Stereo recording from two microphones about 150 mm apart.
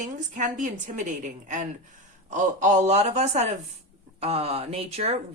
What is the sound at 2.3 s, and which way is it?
A man's voice, 55° right (ahead or behind).